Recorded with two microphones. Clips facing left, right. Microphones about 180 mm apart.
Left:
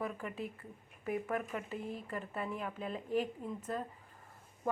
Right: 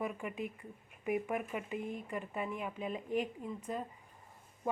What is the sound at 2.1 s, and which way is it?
Speech, 10° right (ahead or behind).